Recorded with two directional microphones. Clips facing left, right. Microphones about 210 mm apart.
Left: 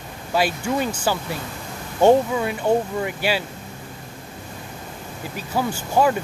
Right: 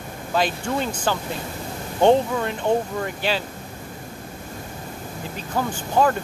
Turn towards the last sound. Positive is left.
turn(degrees=10)  # may be behind; listen again after turning